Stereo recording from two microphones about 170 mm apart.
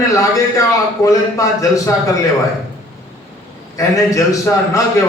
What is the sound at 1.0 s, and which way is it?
Speech, 20° left (ahead or behind).